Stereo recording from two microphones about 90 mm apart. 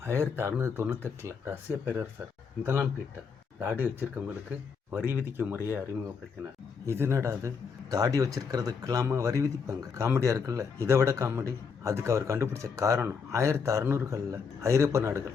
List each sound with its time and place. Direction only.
0.0 s a man's voice: 30° right (ahead or behind)
3.6 s speech: 20° right (ahead or behind)
6.8 s a man's voice: 30° right (ahead or behind)